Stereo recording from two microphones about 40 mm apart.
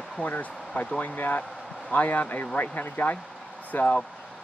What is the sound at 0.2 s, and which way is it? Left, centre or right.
Speech, left.